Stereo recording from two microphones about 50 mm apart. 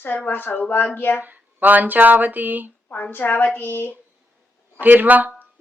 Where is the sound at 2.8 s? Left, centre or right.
Left.